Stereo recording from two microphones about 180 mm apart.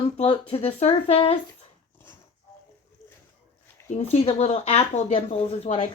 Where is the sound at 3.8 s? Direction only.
35° left (ahead or behind).